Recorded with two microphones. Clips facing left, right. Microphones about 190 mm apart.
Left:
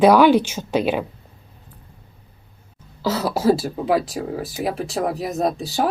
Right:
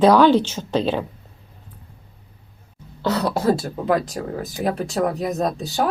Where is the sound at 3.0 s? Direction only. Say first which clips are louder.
Even; 5° left (ahead or behind).